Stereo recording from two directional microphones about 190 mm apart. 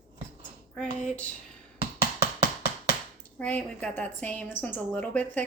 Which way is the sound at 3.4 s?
5° left (ahead or behind).